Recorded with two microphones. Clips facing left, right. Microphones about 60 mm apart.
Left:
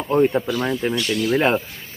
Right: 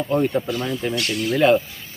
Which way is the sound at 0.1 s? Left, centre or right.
Left.